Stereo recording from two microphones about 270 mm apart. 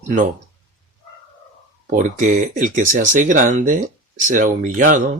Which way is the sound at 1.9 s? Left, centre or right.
Right.